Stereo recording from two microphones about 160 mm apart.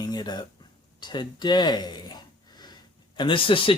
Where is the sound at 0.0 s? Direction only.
25° left (ahead or behind).